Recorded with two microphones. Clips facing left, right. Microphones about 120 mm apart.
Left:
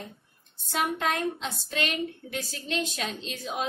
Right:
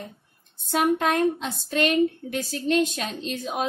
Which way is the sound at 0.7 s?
45° right (ahead or behind).